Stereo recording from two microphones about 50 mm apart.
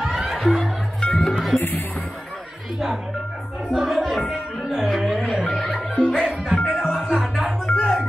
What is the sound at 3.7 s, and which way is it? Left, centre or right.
Music, centre.